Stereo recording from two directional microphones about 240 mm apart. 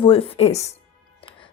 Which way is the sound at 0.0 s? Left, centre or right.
Left.